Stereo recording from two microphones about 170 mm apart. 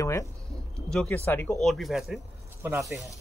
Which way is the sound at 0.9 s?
5° left (ahead or behind).